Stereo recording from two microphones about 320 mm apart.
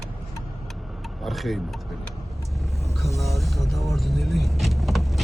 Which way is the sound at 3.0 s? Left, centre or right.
Centre.